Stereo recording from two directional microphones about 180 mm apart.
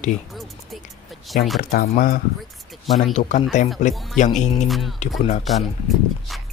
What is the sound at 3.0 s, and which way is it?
Speech, 40° left (ahead or behind).